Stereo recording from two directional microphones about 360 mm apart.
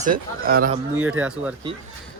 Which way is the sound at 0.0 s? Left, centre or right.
Right.